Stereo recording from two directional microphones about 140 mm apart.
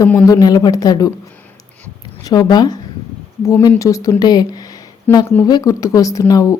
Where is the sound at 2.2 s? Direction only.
30° left (ahead or behind).